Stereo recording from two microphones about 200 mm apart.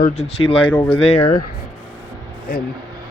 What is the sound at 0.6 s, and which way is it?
Speech, 10° left (ahead or behind).